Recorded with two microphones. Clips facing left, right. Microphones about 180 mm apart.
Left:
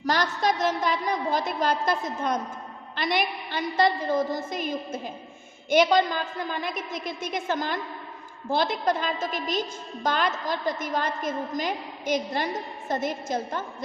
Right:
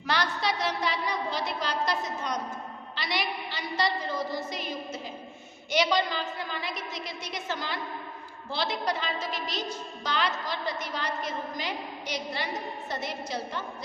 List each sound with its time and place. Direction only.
0.0 s a woman's voice: 45° left (ahead or behind)